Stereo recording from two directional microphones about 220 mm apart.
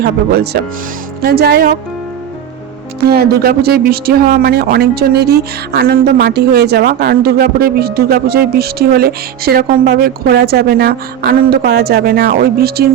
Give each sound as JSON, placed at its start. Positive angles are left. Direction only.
{"t": 0.0, "sound": "speech", "side_deg": -45}
{"t": 3.1, "sound": "speech", "side_deg": -45}